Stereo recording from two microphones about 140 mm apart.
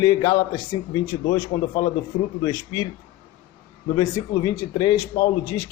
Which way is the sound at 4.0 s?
30° left (ahead or behind).